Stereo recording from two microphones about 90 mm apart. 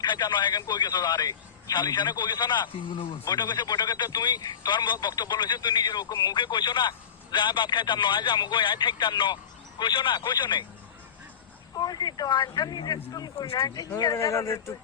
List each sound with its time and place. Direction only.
0.0 s a man's voice: 55° left (ahead or behind)
11.8 s speech: 45° left (ahead or behind)